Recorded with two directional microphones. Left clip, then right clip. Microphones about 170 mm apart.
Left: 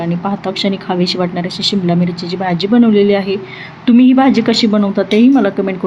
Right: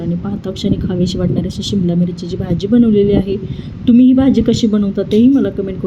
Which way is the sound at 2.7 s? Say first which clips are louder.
Left 1 dB; 45° right (ahead or behind).